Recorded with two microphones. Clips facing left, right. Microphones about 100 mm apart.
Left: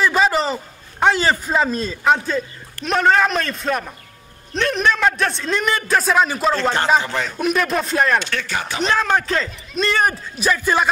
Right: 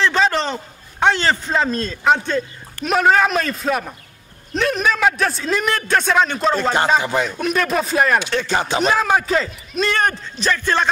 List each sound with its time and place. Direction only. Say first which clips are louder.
0.0 s a man's voice: left 1 dB; 5° left (ahead or behind)
7.0 s speech: right 3 dB; 15° right (ahead or behind)
7.3 s a man's voice: even; centre (ahead or behind)
8.3 s speech: right 5 dB; 25° right (ahead or behind)
8.8 s a man's voice: left 1 dB; 10° right (ahead or behind); by 10.9 s 10° left (ahead or behind)